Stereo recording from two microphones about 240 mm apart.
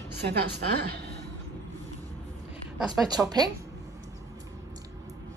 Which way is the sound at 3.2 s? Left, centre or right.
Centre.